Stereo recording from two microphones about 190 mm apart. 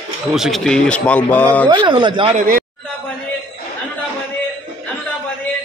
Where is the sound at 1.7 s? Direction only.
25° right (ahead or behind).